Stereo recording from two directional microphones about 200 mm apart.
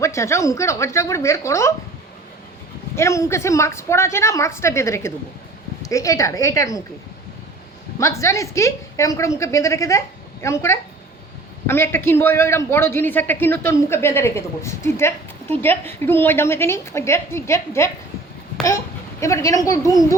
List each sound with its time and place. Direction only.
0.0 s a man's voice: 15° left (ahead or behind)
2.9 s a man's voice: 15° left (ahead or behind)
7.9 s a man's voice: 15° left (ahead or behind)
19.2 s a man's voice: 15° left (ahead or behind)